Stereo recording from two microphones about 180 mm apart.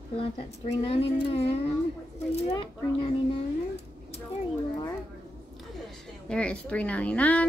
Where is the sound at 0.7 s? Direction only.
30° left (ahead or behind).